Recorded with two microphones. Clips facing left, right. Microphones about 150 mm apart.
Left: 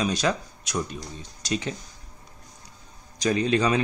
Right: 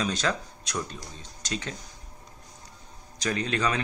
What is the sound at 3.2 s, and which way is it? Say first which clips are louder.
Speech: left 5 dB; 15° left (ahead or behind).